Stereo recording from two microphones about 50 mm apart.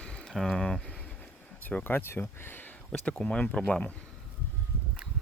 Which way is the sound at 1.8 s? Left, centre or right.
Left.